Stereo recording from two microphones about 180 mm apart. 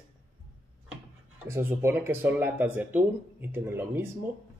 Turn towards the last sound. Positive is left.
turn(degrees=-10)  # may be behind; listen again after turning